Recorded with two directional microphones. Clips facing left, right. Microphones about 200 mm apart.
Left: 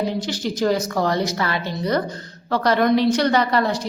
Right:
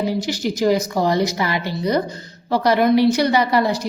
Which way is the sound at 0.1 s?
10° right (ahead or behind).